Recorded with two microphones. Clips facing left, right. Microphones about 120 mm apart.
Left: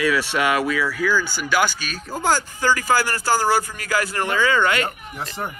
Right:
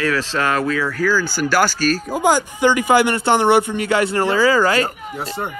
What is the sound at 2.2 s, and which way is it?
Speech, 15° right (ahead or behind).